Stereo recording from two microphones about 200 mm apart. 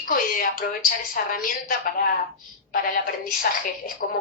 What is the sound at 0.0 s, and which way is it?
A woman's voice, 45° left (ahead or behind).